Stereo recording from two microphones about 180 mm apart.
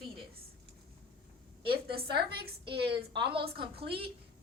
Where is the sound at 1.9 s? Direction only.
60° right (ahead or behind).